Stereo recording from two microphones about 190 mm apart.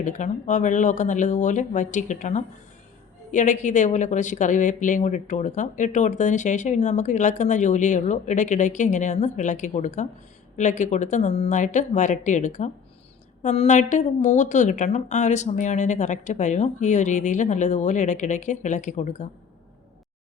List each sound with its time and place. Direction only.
0.0 s speech: 40° left (ahead or behind)